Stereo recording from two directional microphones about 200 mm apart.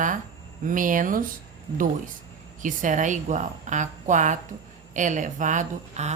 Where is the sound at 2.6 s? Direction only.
40° right (ahead or behind).